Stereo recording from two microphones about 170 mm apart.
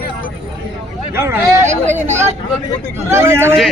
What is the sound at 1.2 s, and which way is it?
Speech, 15° right (ahead or behind).